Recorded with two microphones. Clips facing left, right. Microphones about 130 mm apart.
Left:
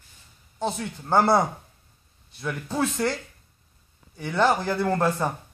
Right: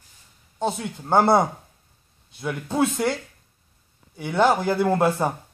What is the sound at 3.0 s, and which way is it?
Speech, 10° right (ahead or behind).